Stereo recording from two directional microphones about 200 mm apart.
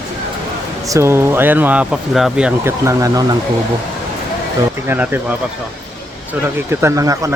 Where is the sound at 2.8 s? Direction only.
15° right (ahead or behind).